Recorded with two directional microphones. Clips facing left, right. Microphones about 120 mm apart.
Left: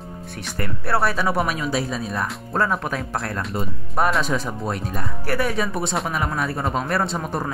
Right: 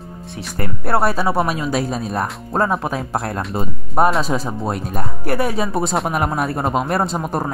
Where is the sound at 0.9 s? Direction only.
40° right (ahead or behind).